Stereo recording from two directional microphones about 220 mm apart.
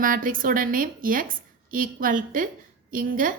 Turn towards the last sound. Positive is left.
turn(degrees=-40)  # may be behind; listen again after turning